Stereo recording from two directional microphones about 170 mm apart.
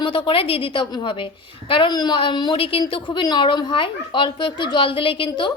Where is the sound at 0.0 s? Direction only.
30° left (ahead or behind).